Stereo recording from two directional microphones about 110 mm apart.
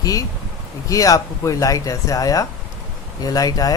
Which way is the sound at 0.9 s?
30° left (ahead or behind).